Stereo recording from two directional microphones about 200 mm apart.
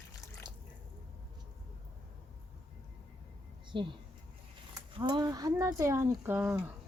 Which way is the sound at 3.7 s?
25° right (ahead or behind).